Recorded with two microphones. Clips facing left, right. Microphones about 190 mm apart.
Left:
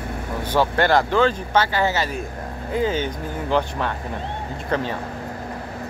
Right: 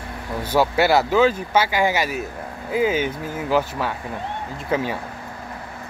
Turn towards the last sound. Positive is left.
turn(degrees=-10)  # may be behind; listen again after turning